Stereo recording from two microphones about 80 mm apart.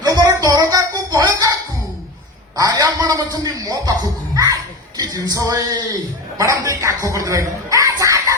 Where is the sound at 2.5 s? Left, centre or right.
Right.